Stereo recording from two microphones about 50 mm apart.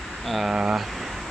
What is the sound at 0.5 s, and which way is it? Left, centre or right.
Speech, centre.